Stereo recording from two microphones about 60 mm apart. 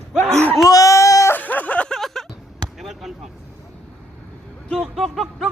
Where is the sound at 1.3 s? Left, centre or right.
Left.